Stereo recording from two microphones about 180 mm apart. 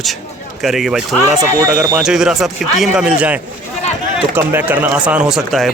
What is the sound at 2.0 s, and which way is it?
A man's voice, 5° right (ahead or behind).